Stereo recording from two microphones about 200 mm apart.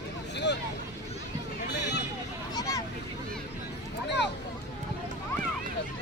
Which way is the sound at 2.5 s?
20° left (ahead or behind).